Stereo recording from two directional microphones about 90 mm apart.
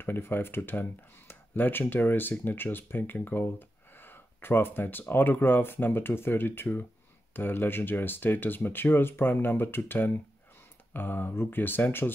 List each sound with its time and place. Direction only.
0.0 s speech: 25° left (ahead or behind)